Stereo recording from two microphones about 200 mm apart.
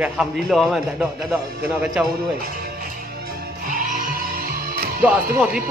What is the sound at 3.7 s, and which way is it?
Music, 40° right (ahead or behind).